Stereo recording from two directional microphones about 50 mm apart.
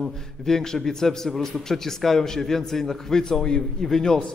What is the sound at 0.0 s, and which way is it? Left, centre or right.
A man's voice, centre.